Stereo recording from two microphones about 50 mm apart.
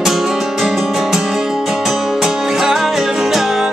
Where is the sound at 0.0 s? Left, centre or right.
Centre.